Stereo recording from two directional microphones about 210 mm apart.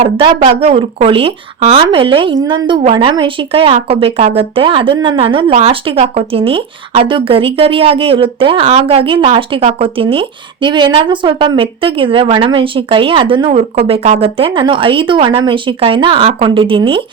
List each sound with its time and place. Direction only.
0.0 s speech: 25° right (ahead or behind)